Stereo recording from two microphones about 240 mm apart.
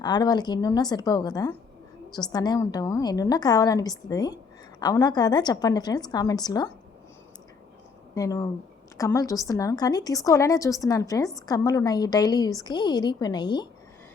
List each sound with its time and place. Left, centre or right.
0.0 s a woman's voice: centre
8.1 s a woman's voice: centre